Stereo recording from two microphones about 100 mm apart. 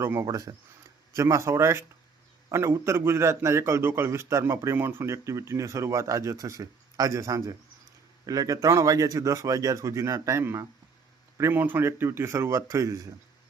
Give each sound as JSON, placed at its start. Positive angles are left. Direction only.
{"t": 0.0, "sound": "a man's voice", "side_deg": -30}